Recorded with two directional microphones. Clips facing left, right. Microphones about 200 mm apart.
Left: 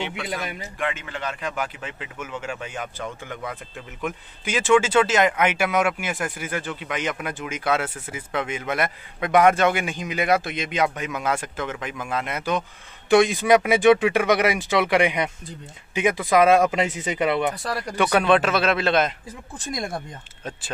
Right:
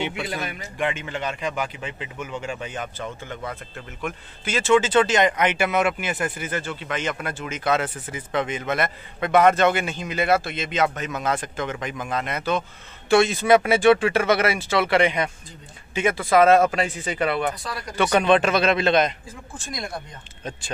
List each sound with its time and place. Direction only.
0.7 s speech: centre (ahead or behind)
4.0 s speech: 15° left (ahead or behind)
17.9 s speech: 5° left (ahead or behind)
19.7 s speech: 50° left (ahead or behind)